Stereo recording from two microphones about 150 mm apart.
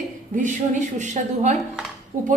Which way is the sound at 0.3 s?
60° right (ahead or behind).